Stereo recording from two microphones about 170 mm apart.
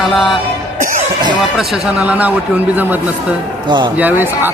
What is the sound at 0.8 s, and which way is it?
Music, 50° right (ahead or behind).